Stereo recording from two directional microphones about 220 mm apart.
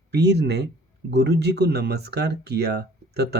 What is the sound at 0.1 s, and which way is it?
Speech, 50° right (ahead or behind).